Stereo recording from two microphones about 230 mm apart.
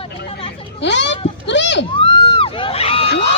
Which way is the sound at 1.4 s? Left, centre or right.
Left.